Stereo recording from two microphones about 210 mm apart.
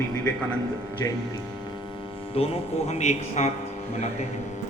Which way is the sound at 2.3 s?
30° left (ahead or behind).